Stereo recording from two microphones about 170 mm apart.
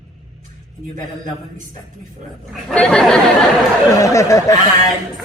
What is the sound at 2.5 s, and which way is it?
Speech, 5° left (ahead or behind).